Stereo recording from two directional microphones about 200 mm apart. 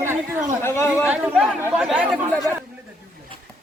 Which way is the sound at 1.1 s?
Centre (ahead or behind).